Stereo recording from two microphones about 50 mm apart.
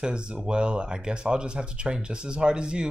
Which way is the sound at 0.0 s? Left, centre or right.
Centre.